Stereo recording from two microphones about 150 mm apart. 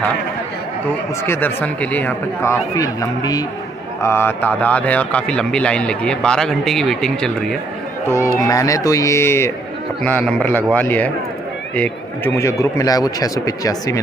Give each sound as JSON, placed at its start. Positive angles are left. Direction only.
{"t": 1.2, "sound": "a man's voice", "side_deg": 15}
{"t": 8.1, "sound": "a man's voice", "side_deg": 20}